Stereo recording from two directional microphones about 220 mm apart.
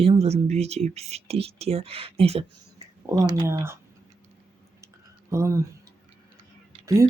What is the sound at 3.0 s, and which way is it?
Speech, 15° right (ahead or behind).